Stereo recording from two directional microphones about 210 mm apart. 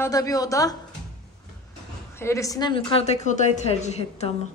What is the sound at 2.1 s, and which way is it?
A woman's voice, 10° left (ahead or behind).